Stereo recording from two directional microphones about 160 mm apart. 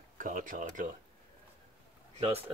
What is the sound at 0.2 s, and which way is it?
Speech, 55° right (ahead or behind).